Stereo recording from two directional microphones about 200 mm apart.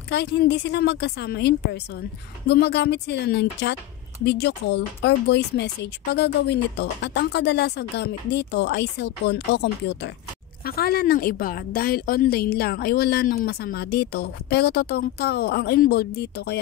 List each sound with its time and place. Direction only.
0.1 s a woman's voice: 55° left (ahead or behind)